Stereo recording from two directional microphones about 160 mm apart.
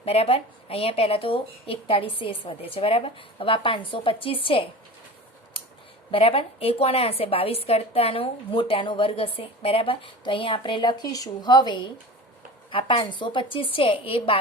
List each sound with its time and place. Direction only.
0.0 s a woman's voice: 40° left (ahead or behind)
6.1 s a woman's voice: 35° left (ahead or behind)